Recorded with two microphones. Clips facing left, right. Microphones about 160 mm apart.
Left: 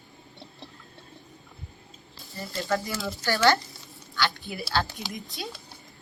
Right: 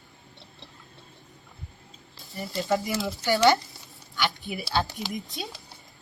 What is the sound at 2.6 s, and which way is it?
A woman's voice, 20° right (ahead or behind).